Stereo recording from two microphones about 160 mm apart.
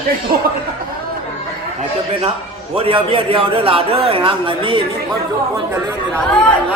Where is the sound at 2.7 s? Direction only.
35° right (ahead or behind).